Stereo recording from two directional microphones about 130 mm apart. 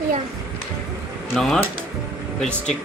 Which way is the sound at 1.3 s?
Centre (ahead or behind).